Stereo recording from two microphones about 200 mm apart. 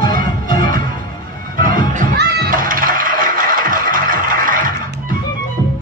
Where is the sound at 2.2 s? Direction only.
50° right (ahead or behind).